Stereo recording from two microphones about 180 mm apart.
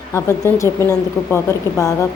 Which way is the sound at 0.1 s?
15° left (ahead or behind).